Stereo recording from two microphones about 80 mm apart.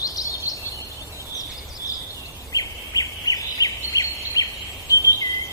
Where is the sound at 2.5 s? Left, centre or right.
Left.